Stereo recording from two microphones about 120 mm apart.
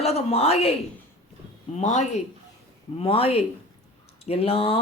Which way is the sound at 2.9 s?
55° left (ahead or behind).